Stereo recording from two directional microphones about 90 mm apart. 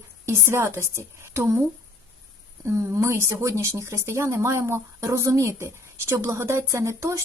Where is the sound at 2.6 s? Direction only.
35° right (ahead or behind).